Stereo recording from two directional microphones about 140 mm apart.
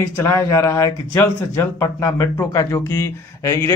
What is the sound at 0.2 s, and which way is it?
Speech, 20° left (ahead or behind).